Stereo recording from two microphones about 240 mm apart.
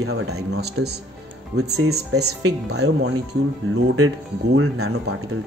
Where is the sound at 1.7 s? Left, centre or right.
Right.